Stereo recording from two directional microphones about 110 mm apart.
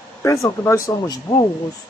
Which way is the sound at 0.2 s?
25° left (ahead or behind).